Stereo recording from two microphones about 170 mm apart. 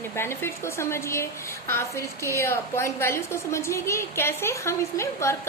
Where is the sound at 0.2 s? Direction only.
15° left (ahead or behind).